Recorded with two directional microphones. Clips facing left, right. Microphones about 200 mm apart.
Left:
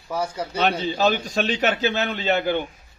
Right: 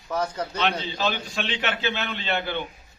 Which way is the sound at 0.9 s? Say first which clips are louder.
Left 6 dB; 40° left (ahead or behind).